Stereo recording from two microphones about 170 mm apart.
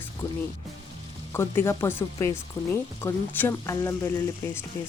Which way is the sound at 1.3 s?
15° left (ahead or behind).